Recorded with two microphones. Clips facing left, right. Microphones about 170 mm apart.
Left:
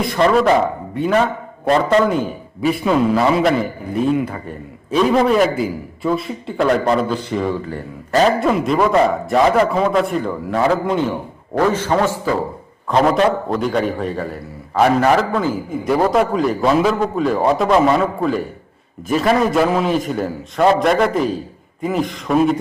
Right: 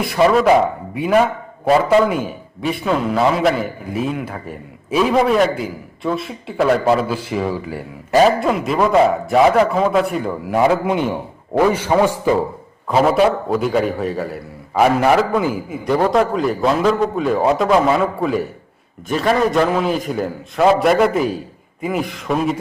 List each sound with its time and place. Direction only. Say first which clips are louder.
0.0 s a man's voice: right 1 dB; 5° right (ahead or behind)
12.9 s a man's voice: right 1 dB; 5° right (ahead or behind)
15.8 s a man's voice: even; centre (ahead or behind)